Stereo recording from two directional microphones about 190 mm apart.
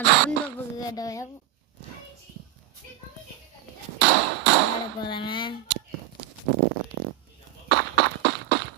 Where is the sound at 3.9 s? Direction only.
70° right (ahead or behind).